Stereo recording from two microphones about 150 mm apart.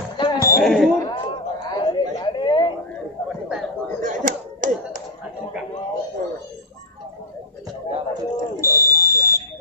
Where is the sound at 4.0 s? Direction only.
60° right (ahead or behind).